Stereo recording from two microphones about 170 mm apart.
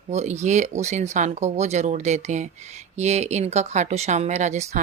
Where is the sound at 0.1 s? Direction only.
40° right (ahead or behind).